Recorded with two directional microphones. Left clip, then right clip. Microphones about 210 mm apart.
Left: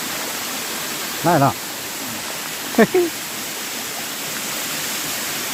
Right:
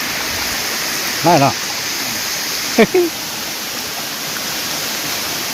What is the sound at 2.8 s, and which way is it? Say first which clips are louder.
Speech: right 3 dB; centre (ahead or behind).